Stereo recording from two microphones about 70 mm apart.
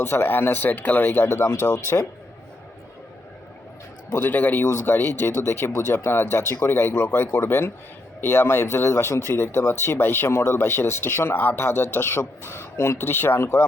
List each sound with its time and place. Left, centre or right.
0.0 s speech: left
1.3 s speech: left
4.1 s speech: left